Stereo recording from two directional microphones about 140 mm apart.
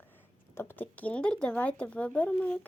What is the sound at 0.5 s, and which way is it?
Speech, 15° left (ahead or behind).